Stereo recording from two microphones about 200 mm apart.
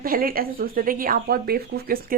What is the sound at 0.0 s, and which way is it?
Speech, 45° right (ahead or behind).